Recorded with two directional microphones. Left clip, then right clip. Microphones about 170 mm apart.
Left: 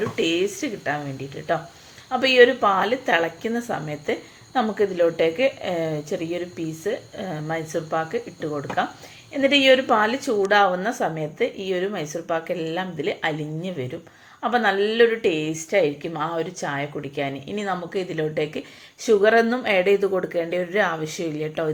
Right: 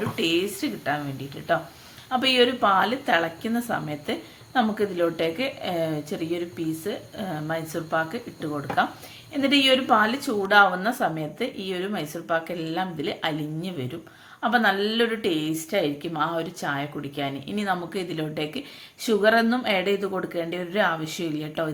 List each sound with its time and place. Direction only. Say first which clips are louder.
0.2 s a woman's voice: left 1 dB; 15° left (ahead or behind)
2.0 s a woman's voice: left 5 dB; 15° left (ahead or behind)